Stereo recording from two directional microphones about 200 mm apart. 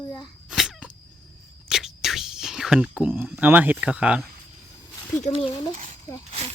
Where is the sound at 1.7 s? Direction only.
Centre (ahead or behind).